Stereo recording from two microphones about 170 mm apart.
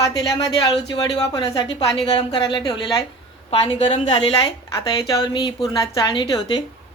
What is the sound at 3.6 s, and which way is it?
Speech, 35° left (ahead or behind).